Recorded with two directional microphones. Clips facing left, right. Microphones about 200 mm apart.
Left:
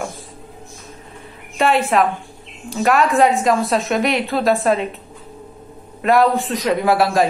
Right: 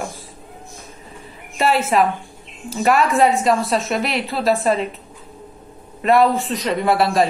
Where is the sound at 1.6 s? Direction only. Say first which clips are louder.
Left 1 dB; 5° right (ahead or behind).